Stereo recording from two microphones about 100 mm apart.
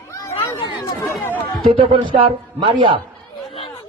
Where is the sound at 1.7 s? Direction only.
55° right (ahead or behind).